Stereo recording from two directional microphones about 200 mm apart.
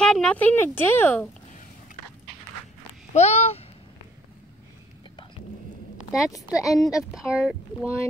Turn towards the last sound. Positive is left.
turn(degrees=0)  # may be behind; listen again after turning